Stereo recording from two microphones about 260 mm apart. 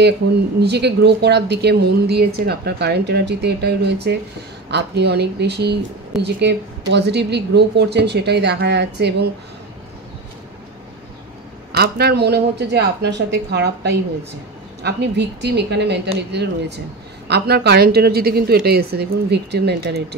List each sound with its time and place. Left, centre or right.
0.6 s speech: right
11.7 s speech: right